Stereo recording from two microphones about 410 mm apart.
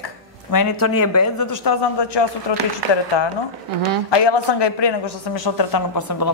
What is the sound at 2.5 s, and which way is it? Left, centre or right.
Speech, left.